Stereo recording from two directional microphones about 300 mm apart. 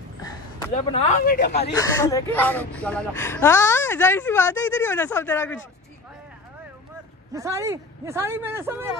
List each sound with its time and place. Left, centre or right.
0.2 s a sound: centre
0.7 s speech: left
1.7 s speech: centre
7.3 s a man's voice: centre